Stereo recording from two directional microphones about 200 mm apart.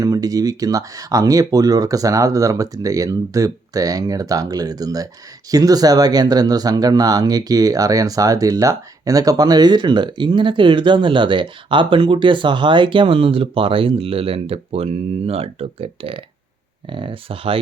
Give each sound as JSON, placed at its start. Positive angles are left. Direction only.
{"t": 0.0, "sound": "speech", "side_deg": -15}